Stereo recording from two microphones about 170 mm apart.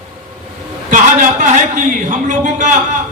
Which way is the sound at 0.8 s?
50° right (ahead or behind).